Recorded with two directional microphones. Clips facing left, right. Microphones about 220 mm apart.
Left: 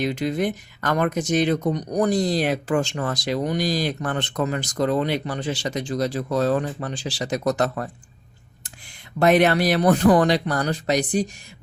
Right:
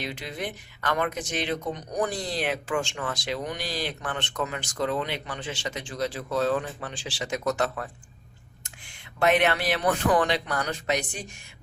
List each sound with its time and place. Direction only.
0.0 s speech: 45° left (ahead or behind)
9.1 s speech: 40° left (ahead or behind)